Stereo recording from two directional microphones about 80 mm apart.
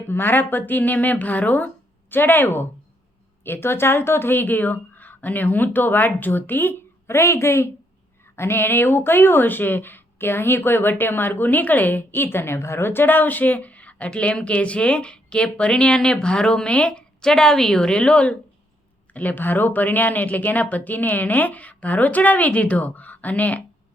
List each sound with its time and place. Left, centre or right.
0.1 s speech: left